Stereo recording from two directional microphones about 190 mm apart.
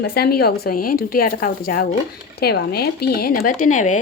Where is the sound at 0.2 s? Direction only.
55° left (ahead or behind).